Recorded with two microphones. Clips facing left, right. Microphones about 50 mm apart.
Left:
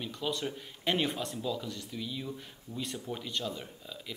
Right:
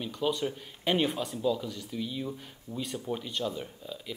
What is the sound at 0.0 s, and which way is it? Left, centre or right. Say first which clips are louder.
Speech: right 4 dB; centre.